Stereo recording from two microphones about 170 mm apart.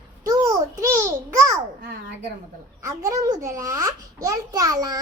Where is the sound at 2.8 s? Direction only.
20° right (ahead or behind).